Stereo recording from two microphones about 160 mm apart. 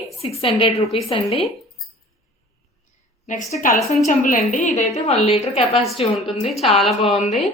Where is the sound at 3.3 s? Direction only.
50° left (ahead or behind).